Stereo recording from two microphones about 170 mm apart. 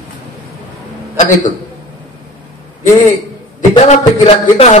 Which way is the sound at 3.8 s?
35° left (ahead or behind).